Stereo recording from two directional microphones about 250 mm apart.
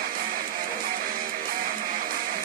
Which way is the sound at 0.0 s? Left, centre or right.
Right.